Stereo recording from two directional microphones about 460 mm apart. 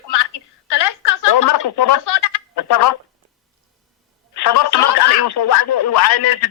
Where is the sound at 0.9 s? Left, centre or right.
Left.